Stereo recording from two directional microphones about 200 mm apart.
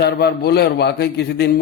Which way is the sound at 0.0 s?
55° left (ahead or behind).